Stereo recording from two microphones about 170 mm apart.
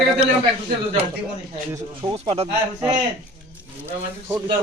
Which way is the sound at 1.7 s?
20° right (ahead or behind).